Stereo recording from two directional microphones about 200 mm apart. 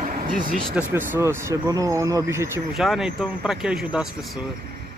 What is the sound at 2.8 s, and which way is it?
Speech, centre (ahead or behind).